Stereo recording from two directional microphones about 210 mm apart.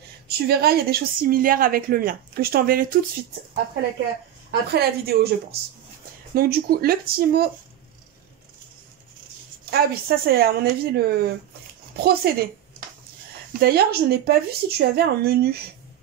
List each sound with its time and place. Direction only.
0.3 s a woman's voice: 45° right (ahead or behind)
4.5 s a woman's voice: 50° right (ahead or behind)
9.7 s a woman's voice: 45° right (ahead or behind)
13.5 s a woman's voice: 45° right (ahead or behind)